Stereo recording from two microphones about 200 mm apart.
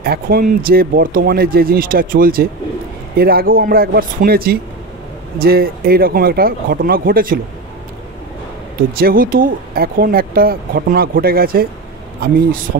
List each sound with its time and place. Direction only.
0.0 s speech: 50° right (ahead or behind)
8.9 s speech: 45° right (ahead or behind)